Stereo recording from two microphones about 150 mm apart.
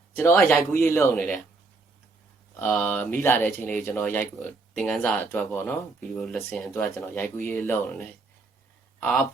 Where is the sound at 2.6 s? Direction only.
10° left (ahead or behind).